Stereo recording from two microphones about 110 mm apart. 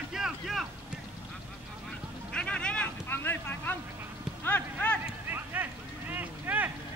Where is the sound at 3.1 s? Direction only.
20° left (ahead or behind).